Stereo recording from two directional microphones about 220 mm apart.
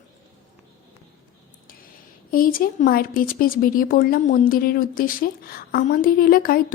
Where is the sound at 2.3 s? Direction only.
40° left (ahead or behind).